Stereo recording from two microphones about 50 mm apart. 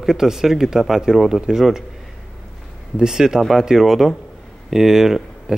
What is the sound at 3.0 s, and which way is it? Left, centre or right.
Speech, centre.